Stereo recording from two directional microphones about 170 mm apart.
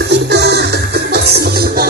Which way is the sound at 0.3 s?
75° right (ahead or behind).